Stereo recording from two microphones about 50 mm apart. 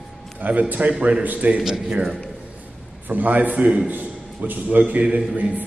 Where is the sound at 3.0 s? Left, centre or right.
Right.